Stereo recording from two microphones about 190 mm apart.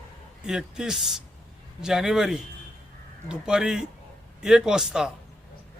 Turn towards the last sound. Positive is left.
turn(degrees=-5)  # may be behind; listen again after turning